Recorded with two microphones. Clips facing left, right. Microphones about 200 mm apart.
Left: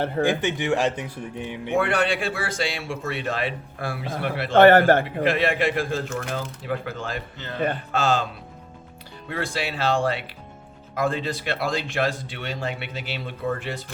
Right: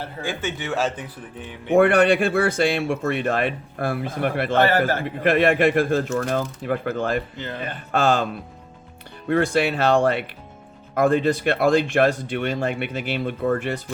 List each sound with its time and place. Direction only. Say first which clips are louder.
0.3 s speech: left 5 dB; 15° left (ahead or behind)
1.7 s a man's voice: right 7 dB; 55° right (ahead or behind)
4.5 s a man's voice: left 7 dB; 60° left (ahead or behind)
5.0 s speech: right 4 dB; 50° right (ahead or behind)
9.3 s a man's voice: right 9 dB; 55° right (ahead or behind)